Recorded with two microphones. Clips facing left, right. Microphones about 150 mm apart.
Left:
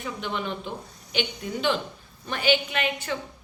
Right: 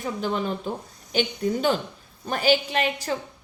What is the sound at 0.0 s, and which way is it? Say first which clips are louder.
A woman's voice: right 4 dB; 40° right (ahead or behind).